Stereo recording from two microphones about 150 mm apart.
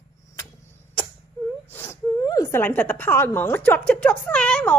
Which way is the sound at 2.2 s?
25° left (ahead or behind).